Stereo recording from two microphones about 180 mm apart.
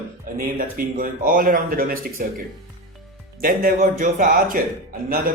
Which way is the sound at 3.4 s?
50° right (ahead or behind).